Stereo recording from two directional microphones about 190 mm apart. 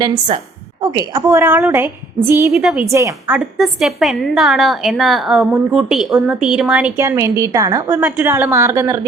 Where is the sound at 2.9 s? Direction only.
15° right (ahead or behind).